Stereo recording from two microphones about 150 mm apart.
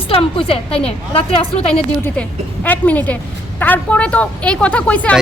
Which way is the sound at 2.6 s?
10° left (ahead or behind).